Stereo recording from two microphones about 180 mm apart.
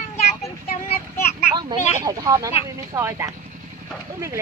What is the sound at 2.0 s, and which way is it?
Speech, 20° right (ahead or behind).